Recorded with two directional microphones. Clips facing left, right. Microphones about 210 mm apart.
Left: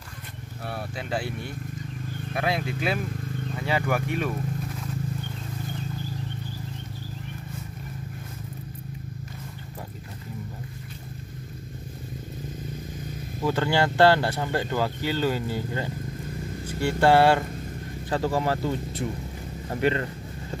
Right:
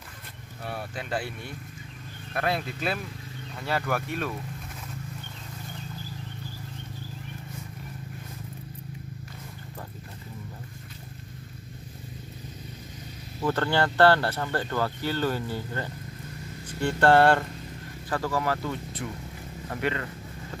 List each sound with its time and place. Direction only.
0.7 s speech: 10° left (ahead or behind)
2.3 s speech: 10° left (ahead or behind)
13.4 s speech: 10° left (ahead or behind)
18.1 s speech: 25° left (ahead or behind)